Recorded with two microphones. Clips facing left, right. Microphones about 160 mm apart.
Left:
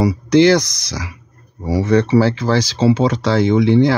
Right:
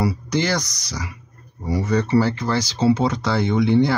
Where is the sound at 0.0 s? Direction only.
75° left (ahead or behind).